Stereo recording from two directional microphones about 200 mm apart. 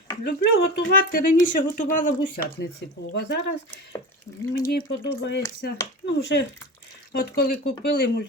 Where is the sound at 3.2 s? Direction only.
60° left (ahead or behind).